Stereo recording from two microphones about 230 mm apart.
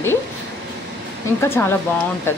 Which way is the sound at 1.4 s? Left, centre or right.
Centre.